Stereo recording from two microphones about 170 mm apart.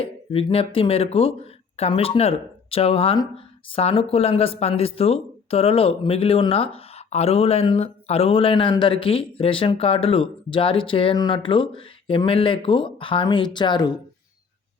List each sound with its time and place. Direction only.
0.0 s speech: 35° left (ahead or behind)